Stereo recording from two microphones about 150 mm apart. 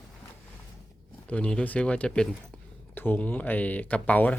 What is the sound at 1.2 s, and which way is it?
Speech, 10° left (ahead or behind).